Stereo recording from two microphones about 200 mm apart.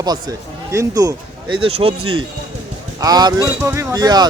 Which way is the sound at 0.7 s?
15° right (ahead or behind).